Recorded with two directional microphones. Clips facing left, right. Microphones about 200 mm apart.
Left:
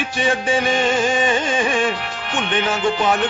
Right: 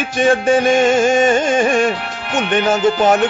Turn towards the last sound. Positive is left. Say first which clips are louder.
# right 5 dB
turn(degrees=-45)  # may be behind; listen again after turning